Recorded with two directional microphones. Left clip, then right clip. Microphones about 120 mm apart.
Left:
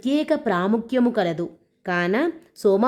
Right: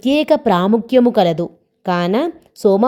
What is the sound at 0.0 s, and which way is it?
A woman's voice, 45° right (ahead or behind).